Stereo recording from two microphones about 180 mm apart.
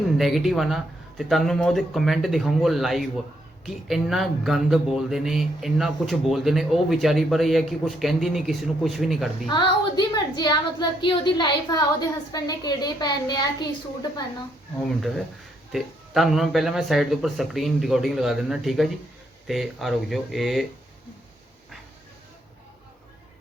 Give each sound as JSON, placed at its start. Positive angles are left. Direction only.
{"t": 0.2, "sound": "speech", "side_deg": 0}
{"t": 9.5, "sound": "a woman's voice", "side_deg": 25}
{"t": 15.7, "sound": "speech", "side_deg": 0}